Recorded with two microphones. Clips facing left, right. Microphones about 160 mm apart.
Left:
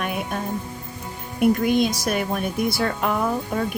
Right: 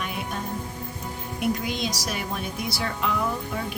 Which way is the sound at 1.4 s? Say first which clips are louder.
Left 9 dB; 55° left (ahead or behind).